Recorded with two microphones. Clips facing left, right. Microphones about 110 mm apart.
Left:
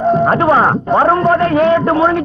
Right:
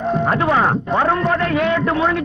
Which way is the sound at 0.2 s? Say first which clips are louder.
Left 5 dB; 35° left (ahead or behind).